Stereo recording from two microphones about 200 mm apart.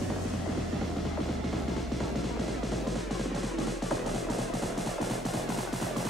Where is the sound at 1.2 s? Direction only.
Centre (ahead or behind).